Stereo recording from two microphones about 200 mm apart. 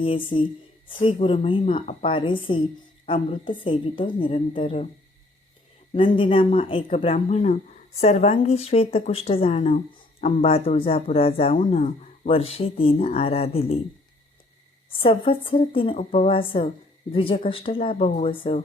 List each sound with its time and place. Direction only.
0.0 s a woman's voice: 25° left (ahead or behind)
5.9 s a woman's voice: 25° left (ahead or behind)
14.8 s a woman's voice: 25° left (ahead or behind)